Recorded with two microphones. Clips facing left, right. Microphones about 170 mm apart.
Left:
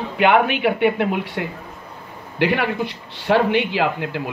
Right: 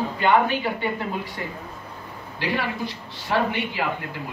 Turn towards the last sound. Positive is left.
turn(degrees=75)  # may be behind; listen again after turning